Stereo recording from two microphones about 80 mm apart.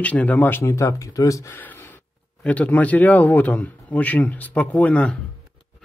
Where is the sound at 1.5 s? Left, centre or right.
Left.